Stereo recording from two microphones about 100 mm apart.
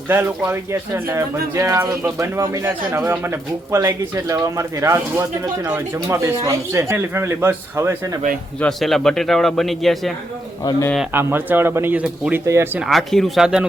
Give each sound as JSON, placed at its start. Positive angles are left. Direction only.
{"t": 0.1, "sound": "speech", "side_deg": -25}
{"t": 8.8, "sound": "a man's voice", "side_deg": 5}
{"t": 10.6, "sound": "a man's voice", "side_deg": 35}
{"t": 11.1, "sound": "speech", "side_deg": -20}
{"t": 12.8, "sound": "a man's voice", "side_deg": 0}